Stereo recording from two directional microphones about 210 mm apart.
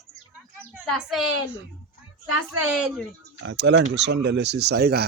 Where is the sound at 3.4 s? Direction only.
60° right (ahead or behind).